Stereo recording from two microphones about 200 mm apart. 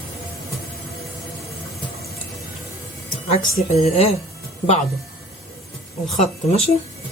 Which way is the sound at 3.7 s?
30° left (ahead or behind).